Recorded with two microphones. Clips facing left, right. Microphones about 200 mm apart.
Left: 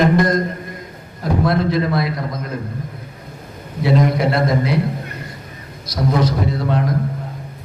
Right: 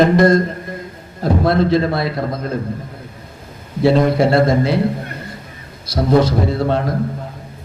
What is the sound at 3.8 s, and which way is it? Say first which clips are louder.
Speech: right 4 dB; 30° right (ahead or behind).